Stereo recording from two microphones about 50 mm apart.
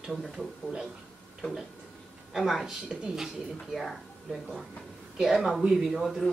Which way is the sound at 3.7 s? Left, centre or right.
Centre.